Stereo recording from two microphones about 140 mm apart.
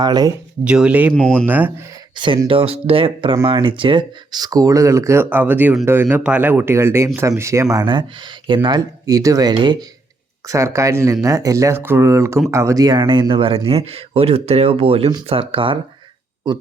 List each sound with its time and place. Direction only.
0.0 s speech: 30° right (ahead or behind)
0.6 s speech: 10° right (ahead or behind)
1.1 s speech: 10° left (ahead or behind)
1.5 s speech: 10° right (ahead or behind)
2.1 s speech: 35° right (ahead or behind)